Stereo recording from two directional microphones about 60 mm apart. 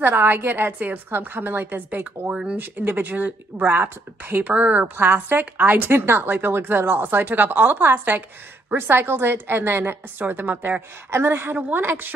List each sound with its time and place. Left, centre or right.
0.0 s a woman's voice: right
4.5 s a woman's voice: right
5.0 s a woman's voice: right
5.9 s a woman's voice: right
11.1 s a woman's voice: right